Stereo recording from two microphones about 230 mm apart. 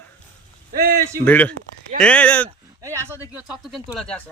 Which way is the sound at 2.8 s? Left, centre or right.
Centre.